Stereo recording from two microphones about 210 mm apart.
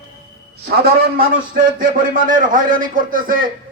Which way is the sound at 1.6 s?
40° right (ahead or behind).